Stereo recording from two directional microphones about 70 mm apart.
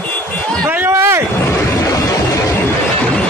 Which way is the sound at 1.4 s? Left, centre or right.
Left.